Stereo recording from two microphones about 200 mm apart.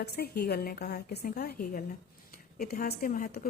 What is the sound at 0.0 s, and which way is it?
A woman's voice, 50° left (ahead or behind).